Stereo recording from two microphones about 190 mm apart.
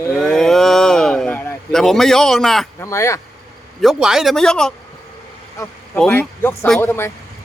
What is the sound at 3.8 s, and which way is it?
Speech, centre (ahead or behind).